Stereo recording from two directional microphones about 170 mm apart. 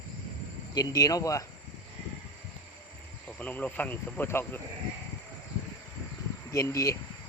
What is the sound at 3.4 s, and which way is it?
Speech, 10° left (ahead or behind).